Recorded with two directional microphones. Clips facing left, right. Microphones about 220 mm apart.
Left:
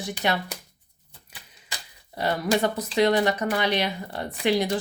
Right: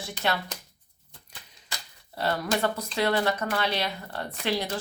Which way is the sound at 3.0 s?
15° left (ahead or behind).